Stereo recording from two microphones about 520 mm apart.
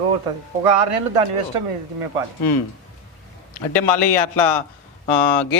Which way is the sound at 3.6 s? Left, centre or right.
Left.